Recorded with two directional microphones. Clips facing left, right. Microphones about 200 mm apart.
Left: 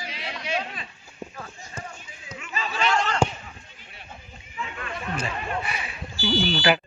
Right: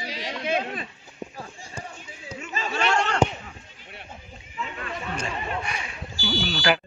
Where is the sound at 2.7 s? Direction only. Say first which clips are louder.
Right 1 dB; 65° right (ahead or behind).